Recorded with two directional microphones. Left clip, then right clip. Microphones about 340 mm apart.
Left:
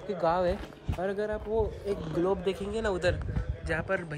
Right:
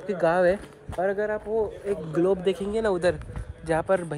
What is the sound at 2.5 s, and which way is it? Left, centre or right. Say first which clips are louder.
A man's voice: right 6 dB; right.